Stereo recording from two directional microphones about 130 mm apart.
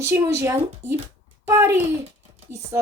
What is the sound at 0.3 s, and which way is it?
A woman's voice, 20° right (ahead or behind).